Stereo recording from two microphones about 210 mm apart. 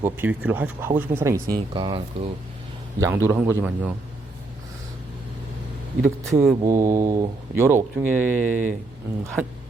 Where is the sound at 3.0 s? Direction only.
10° right (ahead or behind).